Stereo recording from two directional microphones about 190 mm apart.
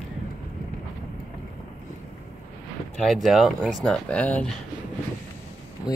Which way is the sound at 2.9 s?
Centre (ahead or behind).